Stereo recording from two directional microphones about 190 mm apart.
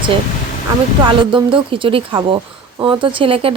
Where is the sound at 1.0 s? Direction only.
25° right (ahead or behind).